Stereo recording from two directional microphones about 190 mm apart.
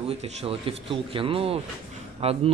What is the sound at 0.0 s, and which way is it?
Speech, 30° right (ahead or behind).